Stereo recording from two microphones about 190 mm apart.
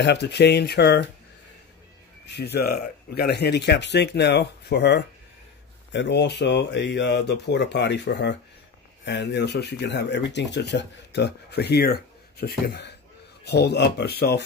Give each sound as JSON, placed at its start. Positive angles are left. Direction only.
{"t": 0.0, "sound": "speech", "side_deg": 65}
{"t": 2.2, "sound": "speech", "side_deg": 60}